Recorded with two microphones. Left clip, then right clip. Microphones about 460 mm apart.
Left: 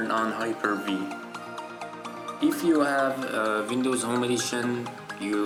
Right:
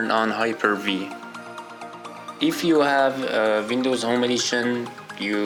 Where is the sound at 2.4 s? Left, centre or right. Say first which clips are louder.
Right 4 dB; left.